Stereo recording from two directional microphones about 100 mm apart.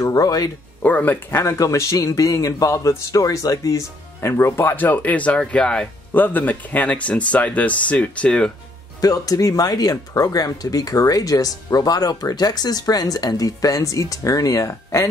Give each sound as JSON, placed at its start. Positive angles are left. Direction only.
{"t": 0.0, "sound": "speech", "side_deg": 40}
{"t": 0.8, "sound": "speech", "side_deg": 15}
{"t": 1.3, "sound": "a man's voice", "side_deg": 30}
{"t": 9.0, "sound": "speech", "side_deg": 35}